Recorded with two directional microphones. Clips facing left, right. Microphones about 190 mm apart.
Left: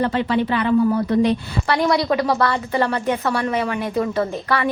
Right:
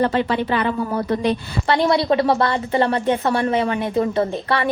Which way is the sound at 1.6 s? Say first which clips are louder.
Right 2 dB; 25° right (ahead or behind).